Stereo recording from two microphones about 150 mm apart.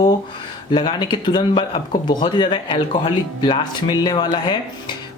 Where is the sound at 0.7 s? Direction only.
30° left (ahead or behind).